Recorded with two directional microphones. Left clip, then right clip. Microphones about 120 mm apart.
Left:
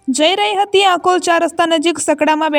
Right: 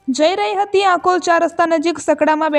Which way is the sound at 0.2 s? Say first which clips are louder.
Left 2 dB; 25° left (ahead or behind).